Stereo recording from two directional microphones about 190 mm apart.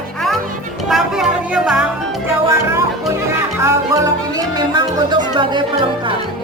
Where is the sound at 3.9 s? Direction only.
20° right (ahead or behind).